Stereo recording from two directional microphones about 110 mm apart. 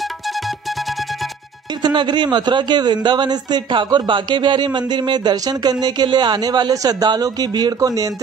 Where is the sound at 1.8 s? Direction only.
40° right (ahead or behind).